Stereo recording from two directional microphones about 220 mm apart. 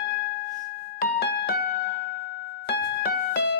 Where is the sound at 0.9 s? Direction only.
45° left (ahead or behind).